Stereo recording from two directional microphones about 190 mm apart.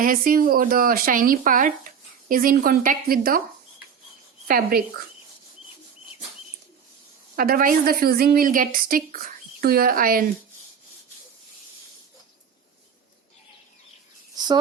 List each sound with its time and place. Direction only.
0.0 s a woman's voice: 45° right (ahead or behind)
4.4 s a woman's voice: 50° right (ahead or behind)
7.3 s a woman's voice: 50° right (ahead or behind)
14.3 s a sound: 20° right (ahead or behind)